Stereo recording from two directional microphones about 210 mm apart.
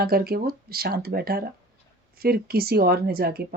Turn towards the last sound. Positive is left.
turn(degrees=-45)  # may be behind; listen again after turning